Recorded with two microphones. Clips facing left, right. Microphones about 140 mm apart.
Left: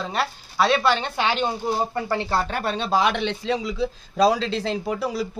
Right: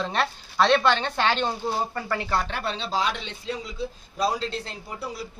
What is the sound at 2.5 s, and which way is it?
A man's voice, 45° left (ahead or behind).